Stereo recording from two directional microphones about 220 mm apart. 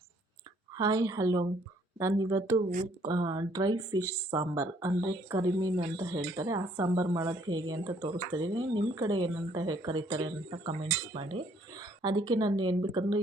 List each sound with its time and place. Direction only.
0.8 s speech: 15° right (ahead or behind)